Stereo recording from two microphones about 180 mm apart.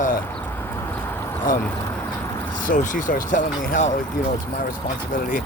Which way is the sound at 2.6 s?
45° left (ahead or behind).